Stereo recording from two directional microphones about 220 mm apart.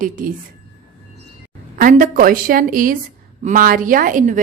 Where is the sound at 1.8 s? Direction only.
35° right (ahead or behind).